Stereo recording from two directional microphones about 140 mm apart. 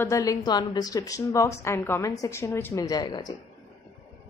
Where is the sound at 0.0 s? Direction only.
25° left (ahead or behind).